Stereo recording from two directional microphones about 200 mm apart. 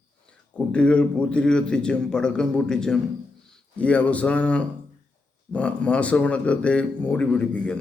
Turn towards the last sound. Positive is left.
turn(degrees=5)  # may be behind; listen again after turning